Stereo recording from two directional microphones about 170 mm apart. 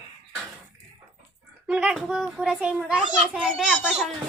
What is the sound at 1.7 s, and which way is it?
A child's voice, 5° right (ahead or behind).